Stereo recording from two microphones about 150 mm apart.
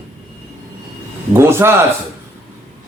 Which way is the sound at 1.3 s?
15° right (ahead or behind).